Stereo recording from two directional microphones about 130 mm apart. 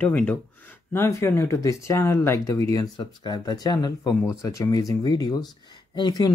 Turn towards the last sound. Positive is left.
turn(degrees=30)  # may be behind; listen again after turning